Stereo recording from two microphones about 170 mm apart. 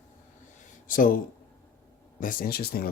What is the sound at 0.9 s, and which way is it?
Speech, 55° left (ahead or behind).